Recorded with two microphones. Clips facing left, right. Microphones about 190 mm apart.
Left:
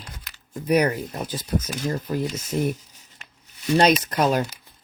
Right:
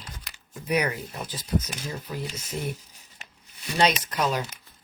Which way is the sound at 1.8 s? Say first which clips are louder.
Left 8 dB; 60° left (ahead or behind).